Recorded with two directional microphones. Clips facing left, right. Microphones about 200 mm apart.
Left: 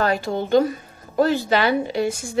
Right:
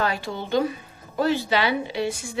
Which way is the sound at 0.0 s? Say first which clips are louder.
Left 5 dB; 45° left (ahead or behind).